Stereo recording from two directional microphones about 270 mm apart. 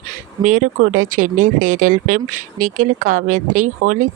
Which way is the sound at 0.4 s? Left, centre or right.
Right.